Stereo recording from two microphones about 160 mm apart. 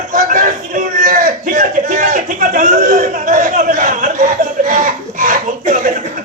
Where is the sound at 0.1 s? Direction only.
55° right (ahead or behind).